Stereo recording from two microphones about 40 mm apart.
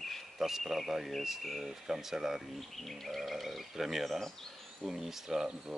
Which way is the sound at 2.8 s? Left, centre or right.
Centre.